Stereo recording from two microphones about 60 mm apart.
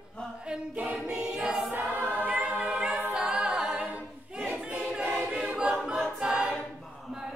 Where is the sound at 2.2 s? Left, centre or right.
Right.